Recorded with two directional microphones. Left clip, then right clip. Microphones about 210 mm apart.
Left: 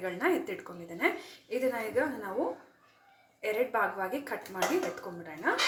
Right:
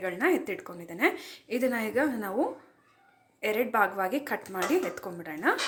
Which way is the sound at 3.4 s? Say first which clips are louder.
Right 4 dB; 35° right (ahead or behind).